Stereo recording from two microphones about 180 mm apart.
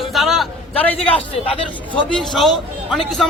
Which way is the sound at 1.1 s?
30° left (ahead or behind).